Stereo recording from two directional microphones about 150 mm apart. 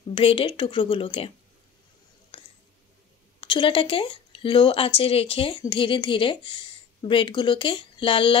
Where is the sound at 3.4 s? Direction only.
35° left (ahead or behind).